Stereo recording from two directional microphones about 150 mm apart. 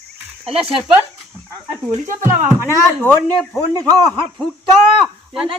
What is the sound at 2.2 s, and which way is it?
Speech, 15° right (ahead or behind).